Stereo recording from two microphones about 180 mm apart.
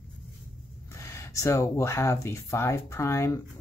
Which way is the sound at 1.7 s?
15° left (ahead or behind).